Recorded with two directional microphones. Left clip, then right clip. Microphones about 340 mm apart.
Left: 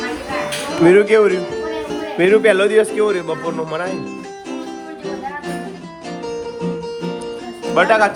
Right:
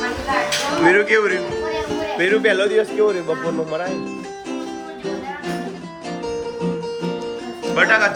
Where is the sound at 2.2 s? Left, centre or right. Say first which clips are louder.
Left 5 dB; centre.